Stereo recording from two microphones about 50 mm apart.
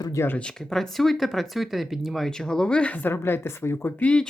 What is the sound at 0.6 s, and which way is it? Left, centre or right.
Speech, centre.